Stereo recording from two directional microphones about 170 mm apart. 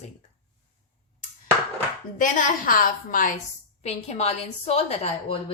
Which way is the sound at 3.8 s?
40° left (ahead or behind).